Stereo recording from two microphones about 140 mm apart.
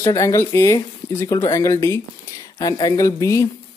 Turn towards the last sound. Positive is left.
turn(degrees=20)  # may be behind; listen again after turning